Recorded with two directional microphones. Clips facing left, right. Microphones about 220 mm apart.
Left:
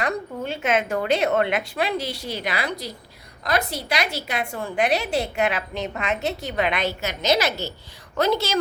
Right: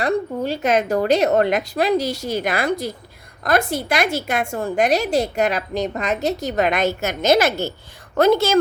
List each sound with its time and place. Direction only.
0.0 s a woman's voice: 35° right (ahead or behind)